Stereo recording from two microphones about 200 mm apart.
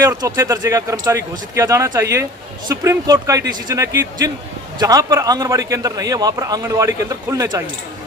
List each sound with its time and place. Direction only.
0.0 s a man's voice: 15° right (ahead or behind)